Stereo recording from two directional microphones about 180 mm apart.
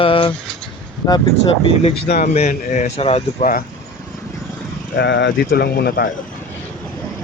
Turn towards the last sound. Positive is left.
turn(degrees=60)  # may be behind; listen again after turning